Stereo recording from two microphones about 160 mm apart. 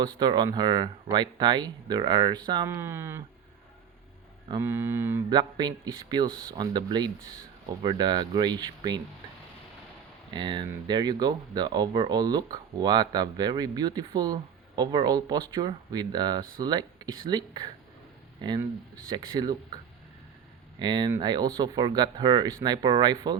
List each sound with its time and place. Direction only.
0.2 s speech: 25° right (ahead or behind)
2.6 s speech: 15° right (ahead or behind)
4.6 s speech: 15° right (ahead or behind)
5.3 s speech: 25° right (ahead or behind)
10.3 s speech: 30° right (ahead or behind)